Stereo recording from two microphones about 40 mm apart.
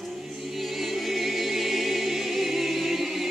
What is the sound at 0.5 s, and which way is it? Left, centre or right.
Choir, centre.